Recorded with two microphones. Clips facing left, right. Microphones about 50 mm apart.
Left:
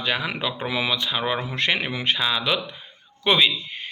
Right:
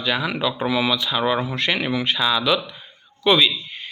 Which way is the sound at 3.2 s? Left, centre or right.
Left.